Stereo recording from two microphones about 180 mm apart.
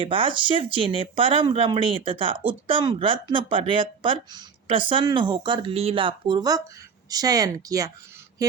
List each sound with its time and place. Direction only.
0.0 s a woman's voice: 30° right (ahead or behind)
8.4 s mantra: 20° right (ahead or behind)